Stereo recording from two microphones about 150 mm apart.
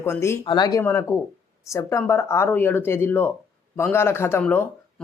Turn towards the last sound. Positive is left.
turn(degrees=15)  # may be behind; listen again after turning